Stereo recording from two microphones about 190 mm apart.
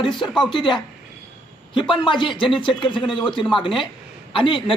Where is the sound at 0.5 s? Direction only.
25° left (ahead or behind).